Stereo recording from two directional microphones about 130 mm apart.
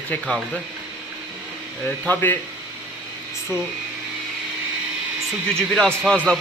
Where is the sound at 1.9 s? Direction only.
10° left (ahead or behind).